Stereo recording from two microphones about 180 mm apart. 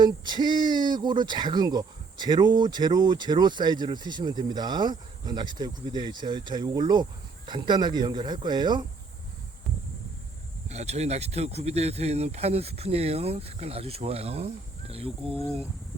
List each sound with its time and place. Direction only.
0.0 s speech: 25° right (ahead or behind)
10.7 s speech: 35° right (ahead or behind)